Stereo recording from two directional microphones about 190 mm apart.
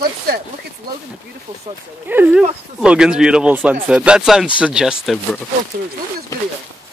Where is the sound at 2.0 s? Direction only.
10° right (ahead or behind).